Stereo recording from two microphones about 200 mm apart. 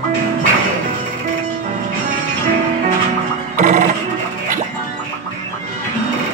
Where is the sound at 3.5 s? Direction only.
40° right (ahead or behind).